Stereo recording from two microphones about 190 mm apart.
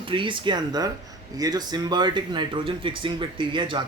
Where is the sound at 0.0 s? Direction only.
25° right (ahead or behind).